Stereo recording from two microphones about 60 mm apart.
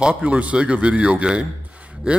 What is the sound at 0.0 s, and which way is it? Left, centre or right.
Speech, right.